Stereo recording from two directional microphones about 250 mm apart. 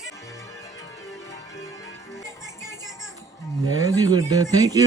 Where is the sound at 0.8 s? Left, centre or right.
Centre.